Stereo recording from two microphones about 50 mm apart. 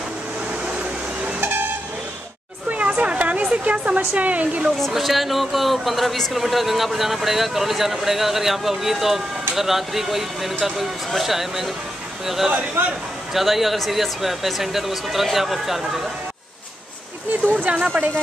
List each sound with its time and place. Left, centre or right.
1.4 s vehicle: right
2.7 s a sound: right
4.9 s speech: centre
17.3 s speech: right